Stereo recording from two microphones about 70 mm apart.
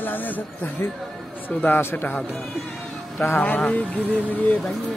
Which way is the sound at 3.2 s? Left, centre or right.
Left.